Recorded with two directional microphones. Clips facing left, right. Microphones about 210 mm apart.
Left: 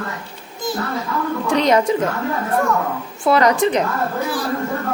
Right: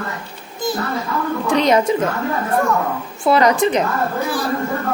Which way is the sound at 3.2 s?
25° right (ahead or behind).